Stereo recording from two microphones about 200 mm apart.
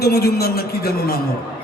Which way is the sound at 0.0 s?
50° left (ahead or behind).